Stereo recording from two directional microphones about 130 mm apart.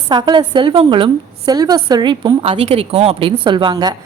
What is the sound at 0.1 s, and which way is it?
A woman's voice, 35° right (ahead or behind).